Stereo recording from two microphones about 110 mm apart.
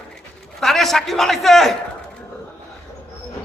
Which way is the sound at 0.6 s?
Centre (ahead or behind).